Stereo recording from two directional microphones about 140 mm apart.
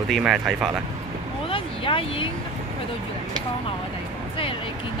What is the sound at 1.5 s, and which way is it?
Speech, 40° left (ahead or behind).